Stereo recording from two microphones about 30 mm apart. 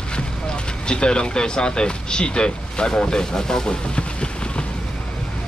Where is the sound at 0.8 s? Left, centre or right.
Left.